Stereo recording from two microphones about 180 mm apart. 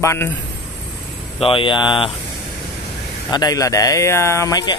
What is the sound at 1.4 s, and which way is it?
Speech, 30° left (ahead or behind).